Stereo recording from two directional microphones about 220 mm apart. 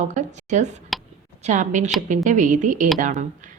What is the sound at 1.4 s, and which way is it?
A woman's voice, 35° right (ahead or behind).